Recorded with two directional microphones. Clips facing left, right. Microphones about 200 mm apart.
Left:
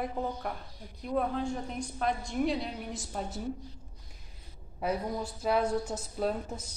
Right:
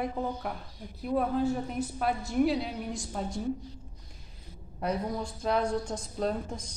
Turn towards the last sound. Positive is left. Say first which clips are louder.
# right 1 dB
turn(degrees=5)  # may be behind; listen again after turning